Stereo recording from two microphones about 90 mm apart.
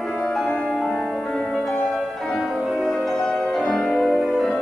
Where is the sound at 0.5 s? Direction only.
10° left (ahead or behind).